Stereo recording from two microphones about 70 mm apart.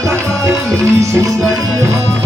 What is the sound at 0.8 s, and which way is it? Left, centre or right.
Music, right.